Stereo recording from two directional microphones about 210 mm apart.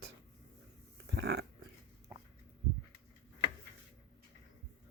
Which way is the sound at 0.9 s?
55° right (ahead or behind).